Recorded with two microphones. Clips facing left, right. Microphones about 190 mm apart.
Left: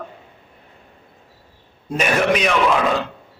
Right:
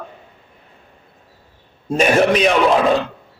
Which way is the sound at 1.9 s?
30° right (ahead or behind).